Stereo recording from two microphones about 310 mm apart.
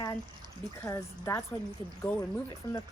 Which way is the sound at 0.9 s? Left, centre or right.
Centre.